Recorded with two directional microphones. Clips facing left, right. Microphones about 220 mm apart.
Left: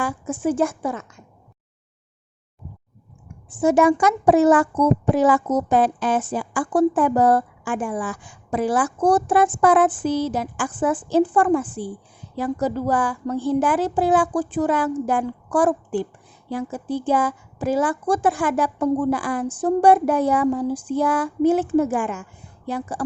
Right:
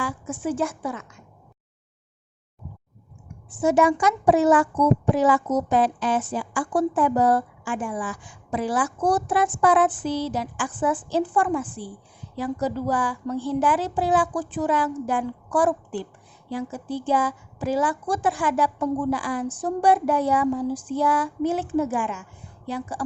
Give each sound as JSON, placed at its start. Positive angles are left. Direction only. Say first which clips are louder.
{"t": 0.0, "sound": "a child's voice", "louder": "left 5 dB", "side_deg": 50}
{"t": 3.6, "sound": "a child's voice", "louder": "left 3 dB", "side_deg": 50}